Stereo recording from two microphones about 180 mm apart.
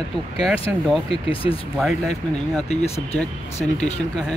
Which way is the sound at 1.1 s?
30° left (ahead or behind).